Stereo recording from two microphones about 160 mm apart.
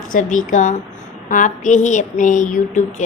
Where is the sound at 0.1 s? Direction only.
55° left (ahead or behind).